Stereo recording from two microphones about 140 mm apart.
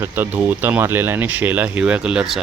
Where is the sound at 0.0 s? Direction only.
15° right (ahead or behind).